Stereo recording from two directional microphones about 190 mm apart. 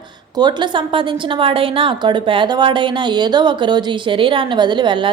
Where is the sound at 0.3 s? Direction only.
20° right (ahead or behind).